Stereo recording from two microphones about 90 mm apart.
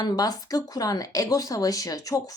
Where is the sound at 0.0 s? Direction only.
45° left (ahead or behind).